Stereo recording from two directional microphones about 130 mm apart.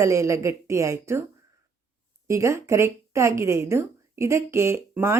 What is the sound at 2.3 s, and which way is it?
A woman's voice, 25° right (ahead or behind).